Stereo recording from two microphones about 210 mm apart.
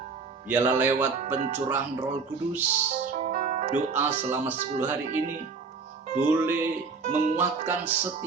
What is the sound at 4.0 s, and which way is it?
Speech, 10° right (ahead or behind).